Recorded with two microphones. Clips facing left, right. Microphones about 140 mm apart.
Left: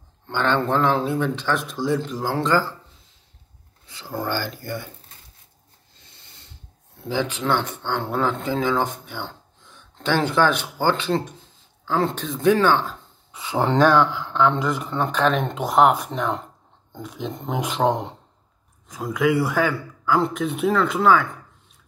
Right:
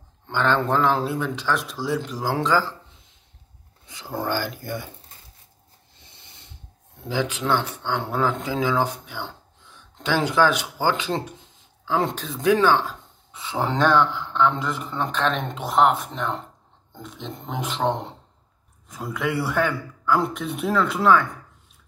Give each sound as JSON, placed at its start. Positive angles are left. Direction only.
{"t": 0.3, "sound": "a man's voice", "side_deg": 0}
{"t": 3.8, "sound": "speech", "side_deg": -20}
{"t": 4.2, "sound": "a man's voice", "side_deg": 0}
{"t": 5.9, "sound": "a sound", "side_deg": -25}
{"t": 7.0, "sound": "a man's voice", "side_deg": -10}
{"t": 12.5, "sound": "a sound", "side_deg": -5}
{"t": 13.7, "sound": "a man's voice", "side_deg": 5}
{"t": 19.1, "sound": "a man's voice", "side_deg": 5}